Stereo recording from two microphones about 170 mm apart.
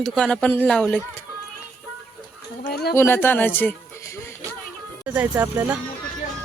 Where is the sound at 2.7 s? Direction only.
70° left (ahead or behind).